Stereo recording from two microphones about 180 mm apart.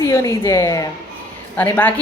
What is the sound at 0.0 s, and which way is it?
A woman's voice, 15° left (ahead or behind).